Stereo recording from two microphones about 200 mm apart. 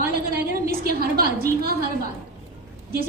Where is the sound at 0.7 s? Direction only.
50° right (ahead or behind).